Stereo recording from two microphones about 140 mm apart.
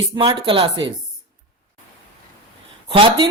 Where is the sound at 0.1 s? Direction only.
35° right (ahead or behind).